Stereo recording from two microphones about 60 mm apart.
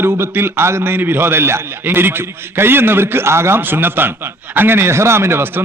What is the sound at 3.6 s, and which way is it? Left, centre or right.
Speech, right.